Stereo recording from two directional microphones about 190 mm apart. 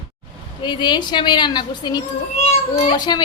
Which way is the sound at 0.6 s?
25° left (ahead or behind).